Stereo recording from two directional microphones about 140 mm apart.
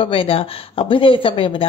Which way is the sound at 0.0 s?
40° left (ahead or behind).